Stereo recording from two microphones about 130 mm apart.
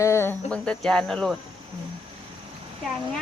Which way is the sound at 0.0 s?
20° left (ahead or behind).